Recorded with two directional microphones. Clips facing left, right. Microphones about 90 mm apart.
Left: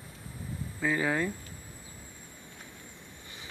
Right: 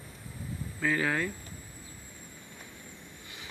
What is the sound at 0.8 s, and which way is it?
Speech, 15° left (ahead or behind).